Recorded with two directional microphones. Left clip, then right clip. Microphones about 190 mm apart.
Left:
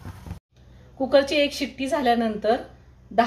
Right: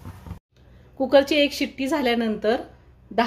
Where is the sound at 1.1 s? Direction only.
45° right (ahead or behind).